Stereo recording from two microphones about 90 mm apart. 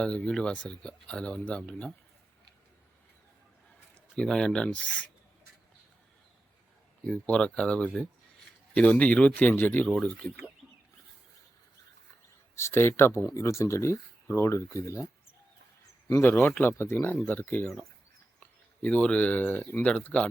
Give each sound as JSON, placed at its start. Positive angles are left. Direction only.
{"t": 0.0, "sound": "speech", "side_deg": 10}
{"t": 4.1, "sound": "speech", "side_deg": 10}
{"t": 7.0, "sound": "speech", "side_deg": 10}
{"t": 12.5, "sound": "speech", "side_deg": 30}
{"t": 16.2, "sound": "speech", "side_deg": 25}
{"t": 18.8, "sound": "speech", "side_deg": 10}